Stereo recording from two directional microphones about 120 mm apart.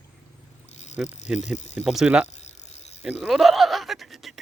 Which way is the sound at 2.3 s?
65° left (ahead or behind).